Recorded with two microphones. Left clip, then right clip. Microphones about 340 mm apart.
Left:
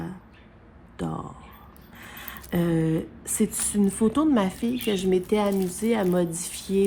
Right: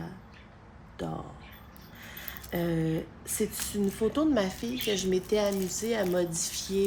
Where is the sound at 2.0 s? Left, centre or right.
Centre.